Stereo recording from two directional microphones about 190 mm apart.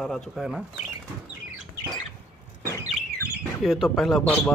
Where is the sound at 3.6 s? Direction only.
Centre (ahead or behind).